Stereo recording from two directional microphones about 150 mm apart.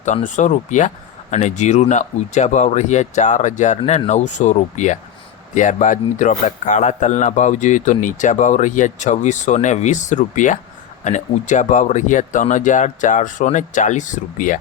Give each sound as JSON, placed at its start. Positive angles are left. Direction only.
{"t": 0.3, "sound": "a man's voice", "side_deg": 55}